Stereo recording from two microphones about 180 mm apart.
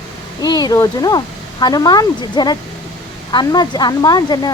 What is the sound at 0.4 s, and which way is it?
Speech, 20° left (ahead or behind).